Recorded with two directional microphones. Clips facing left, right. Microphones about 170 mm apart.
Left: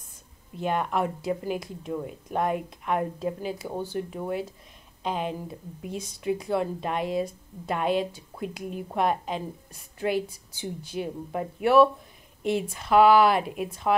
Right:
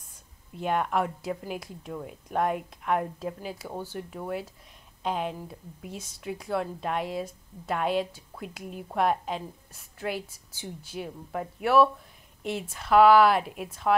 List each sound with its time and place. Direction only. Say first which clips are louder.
0.6 s a woman's voice: even; centre (ahead or behind)
6.3 s a woman's voice: left 3 dB; 10° left (ahead or behind)
13.7 s speech: right 2 dB; 10° left (ahead or behind)